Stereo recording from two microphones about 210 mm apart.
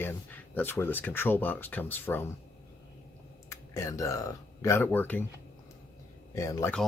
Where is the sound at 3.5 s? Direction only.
15° left (ahead or behind).